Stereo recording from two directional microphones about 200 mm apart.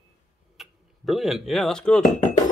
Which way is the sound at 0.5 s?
Centre (ahead or behind).